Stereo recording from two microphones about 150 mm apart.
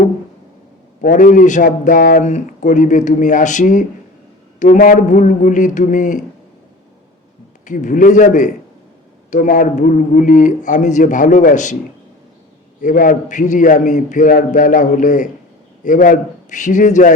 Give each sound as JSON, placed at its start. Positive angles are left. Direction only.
{"t": 1.0, "sound": "speech", "side_deg": 60}
{"t": 7.6, "sound": "speech", "side_deg": 60}
{"t": 12.8, "sound": "speech", "side_deg": 65}